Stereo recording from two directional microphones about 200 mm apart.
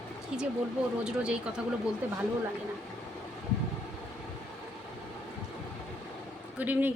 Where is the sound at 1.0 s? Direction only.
5° right (ahead or behind).